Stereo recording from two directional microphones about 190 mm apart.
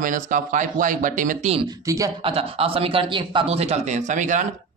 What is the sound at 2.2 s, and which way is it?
A man's voice, 30° right (ahead or behind).